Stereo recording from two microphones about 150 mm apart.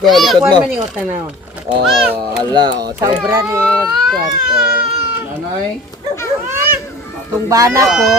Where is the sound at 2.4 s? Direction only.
30° right (ahead or behind).